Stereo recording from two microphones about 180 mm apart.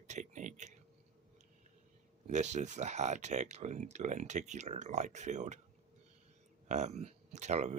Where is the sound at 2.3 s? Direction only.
40° right (ahead or behind).